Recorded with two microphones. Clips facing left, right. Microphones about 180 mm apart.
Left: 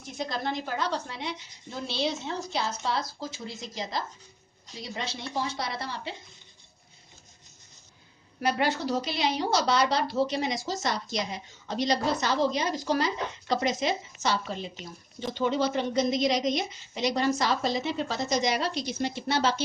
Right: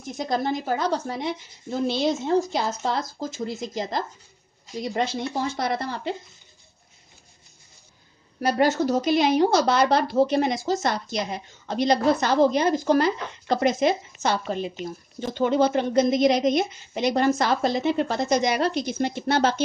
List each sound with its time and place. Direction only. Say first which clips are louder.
0.2 s a woman's voice: right 6 dB; 45° right (ahead or behind)
8.4 s a woman's voice: right 6 dB; 40° right (ahead or behind)